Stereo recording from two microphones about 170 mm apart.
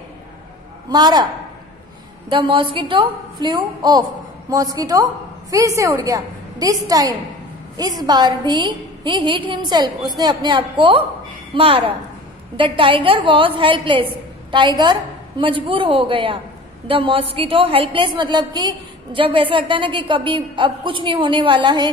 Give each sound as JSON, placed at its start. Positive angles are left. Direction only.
{"t": 0.8, "sound": "a woman's voice", "side_deg": -25}
{"t": 2.2, "sound": "a woman's voice", "side_deg": -25}